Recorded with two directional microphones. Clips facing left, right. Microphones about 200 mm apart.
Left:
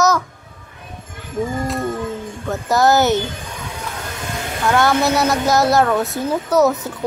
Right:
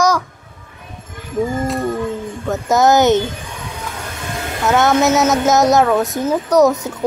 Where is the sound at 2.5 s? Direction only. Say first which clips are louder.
Right 2 dB; 20° right (ahead or behind).